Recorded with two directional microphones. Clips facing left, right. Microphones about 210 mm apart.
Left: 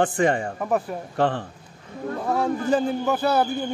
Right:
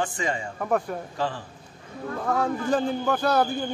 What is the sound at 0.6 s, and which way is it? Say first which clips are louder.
Speech: left 1 dB; 5° left (ahead or behind).